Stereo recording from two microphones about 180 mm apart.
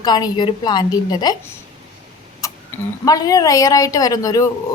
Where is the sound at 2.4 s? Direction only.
20° left (ahead or behind).